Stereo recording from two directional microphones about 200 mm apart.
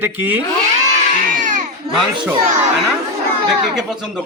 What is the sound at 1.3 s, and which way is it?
Crowd, 40° right (ahead or behind).